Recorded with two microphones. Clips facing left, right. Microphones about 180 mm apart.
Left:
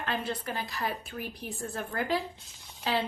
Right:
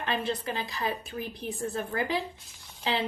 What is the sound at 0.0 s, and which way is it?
A woman's voice, 25° right (ahead or behind).